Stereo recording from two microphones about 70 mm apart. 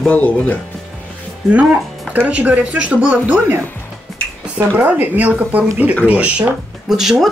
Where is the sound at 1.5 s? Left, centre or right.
Centre.